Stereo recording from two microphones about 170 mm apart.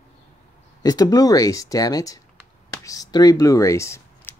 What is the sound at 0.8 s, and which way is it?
Speech, 20° left (ahead or behind).